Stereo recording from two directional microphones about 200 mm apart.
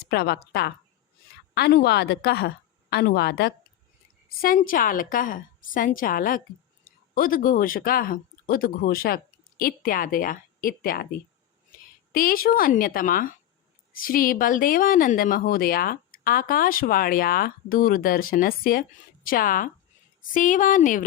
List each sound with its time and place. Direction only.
0.0 s a woman's voice: 50° left (ahead or behind)